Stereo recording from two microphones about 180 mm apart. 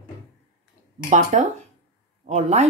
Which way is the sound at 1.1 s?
40° right (ahead or behind).